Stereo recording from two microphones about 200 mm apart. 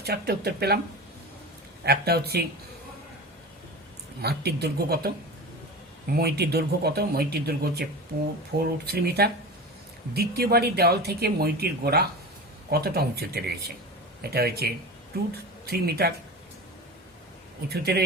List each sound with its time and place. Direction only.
0.0 s speech: 50° right (ahead or behind)
1.8 s speech: 55° right (ahead or behind)
4.2 s speech: 55° right (ahead or behind)
17.7 s speech: 50° right (ahead or behind)